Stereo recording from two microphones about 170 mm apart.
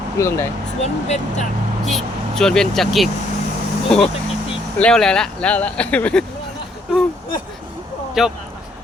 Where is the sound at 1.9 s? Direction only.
Centre (ahead or behind).